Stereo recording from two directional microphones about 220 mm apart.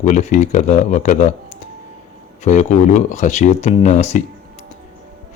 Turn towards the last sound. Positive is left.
turn(degrees=35)  # may be behind; listen again after turning